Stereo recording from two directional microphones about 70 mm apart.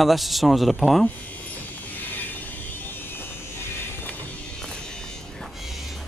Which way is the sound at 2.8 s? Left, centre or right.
Left.